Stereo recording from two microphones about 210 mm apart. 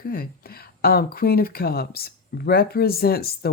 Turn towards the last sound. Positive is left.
turn(degrees=45)  # may be behind; listen again after turning